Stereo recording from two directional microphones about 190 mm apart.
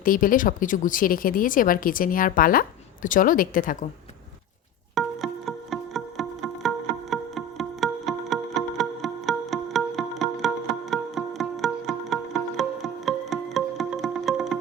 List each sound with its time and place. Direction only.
0.0 s speech: 45° left (ahead or behind)
4.9 s music: centre (ahead or behind)